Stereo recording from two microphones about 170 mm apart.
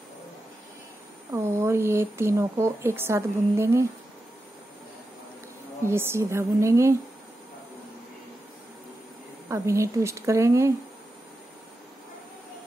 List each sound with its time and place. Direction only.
1.3 s speech: 15° right (ahead or behind)
5.9 s speech: 15° right (ahead or behind)
9.5 s speech: 15° right (ahead or behind)